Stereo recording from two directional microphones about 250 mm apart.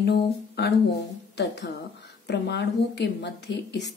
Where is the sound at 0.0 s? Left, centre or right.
Left.